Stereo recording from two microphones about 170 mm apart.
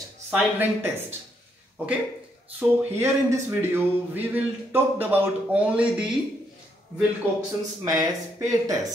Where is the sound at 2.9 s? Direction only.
15° right (ahead or behind).